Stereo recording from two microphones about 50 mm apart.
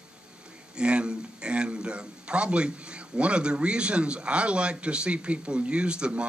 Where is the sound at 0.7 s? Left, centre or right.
Right.